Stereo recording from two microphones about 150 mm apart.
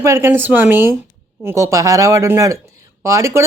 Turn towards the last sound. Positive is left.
turn(degrees=-20)  # may be behind; listen again after turning